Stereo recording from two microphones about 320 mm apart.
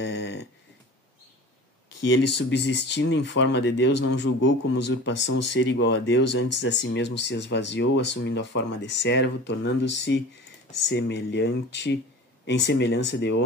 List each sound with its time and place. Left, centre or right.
0.0 s snoring: left
2.3 s speech: left